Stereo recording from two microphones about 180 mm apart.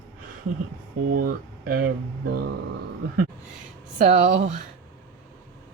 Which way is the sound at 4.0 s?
40° right (ahead or behind).